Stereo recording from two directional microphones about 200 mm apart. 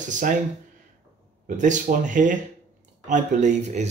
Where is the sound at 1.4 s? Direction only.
40° right (ahead or behind).